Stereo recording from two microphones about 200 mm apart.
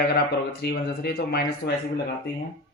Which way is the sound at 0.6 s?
55° left (ahead or behind).